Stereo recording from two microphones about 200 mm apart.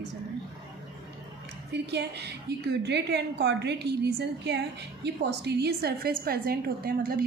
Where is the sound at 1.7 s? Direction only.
55° right (ahead or behind).